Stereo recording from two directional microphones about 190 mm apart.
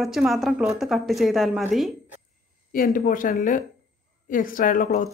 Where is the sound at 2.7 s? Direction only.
50° left (ahead or behind).